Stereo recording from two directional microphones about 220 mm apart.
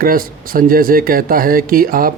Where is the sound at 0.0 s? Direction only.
40° right (ahead or behind).